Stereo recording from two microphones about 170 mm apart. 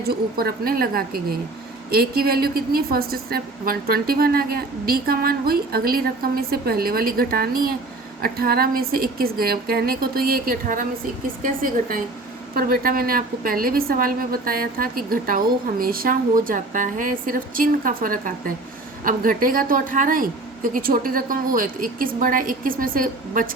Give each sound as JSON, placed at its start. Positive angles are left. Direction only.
{"t": 0.0, "sound": "a woman's voice", "side_deg": -65}